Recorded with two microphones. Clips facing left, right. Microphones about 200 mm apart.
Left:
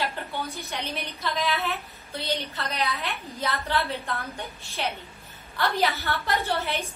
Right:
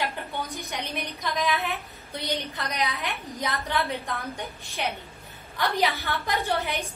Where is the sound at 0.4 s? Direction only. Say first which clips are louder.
Even; 15° right (ahead or behind).